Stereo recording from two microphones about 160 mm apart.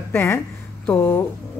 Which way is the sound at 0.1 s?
15° left (ahead or behind).